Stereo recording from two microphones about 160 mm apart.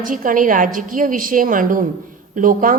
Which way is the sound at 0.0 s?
55° right (ahead or behind).